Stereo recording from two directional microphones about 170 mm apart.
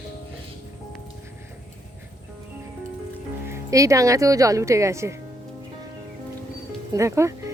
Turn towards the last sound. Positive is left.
turn(degrees=-15)  # may be behind; listen again after turning